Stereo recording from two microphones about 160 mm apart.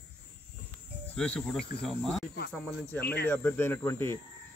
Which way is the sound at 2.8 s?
10° left (ahead or behind).